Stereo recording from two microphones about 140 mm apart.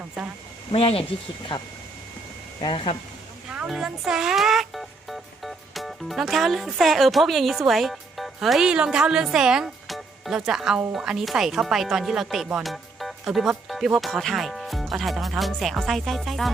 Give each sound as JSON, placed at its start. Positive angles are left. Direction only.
{"t": 0.2, "sound": "speech", "side_deg": 0}
{"t": 0.7, "sound": "speech", "side_deg": 40}
{"t": 3.5, "sound": "speech", "side_deg": -5}